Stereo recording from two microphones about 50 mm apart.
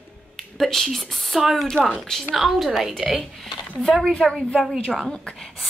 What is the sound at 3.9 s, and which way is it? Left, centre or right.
Speech, centre.